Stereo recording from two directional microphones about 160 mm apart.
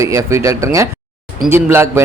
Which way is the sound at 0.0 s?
20° right (ahead or behind).